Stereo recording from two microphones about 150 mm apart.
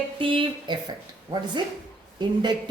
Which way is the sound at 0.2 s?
35° right (ahead or behind).